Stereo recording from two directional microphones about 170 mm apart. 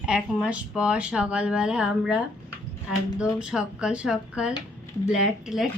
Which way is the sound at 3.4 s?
5° right (ahead or behind).